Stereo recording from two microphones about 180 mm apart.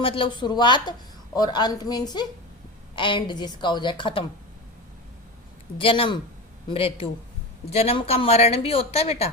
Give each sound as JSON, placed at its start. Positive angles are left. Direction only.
{"t": 0.0, "sound": "a woman's voice", "side_deg": 25}
{"t": 5.7, "sound": "a woman's voice", "side_deg": 30}